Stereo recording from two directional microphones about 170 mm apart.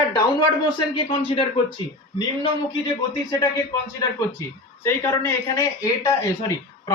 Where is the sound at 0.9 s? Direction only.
30° left (ahead or behind).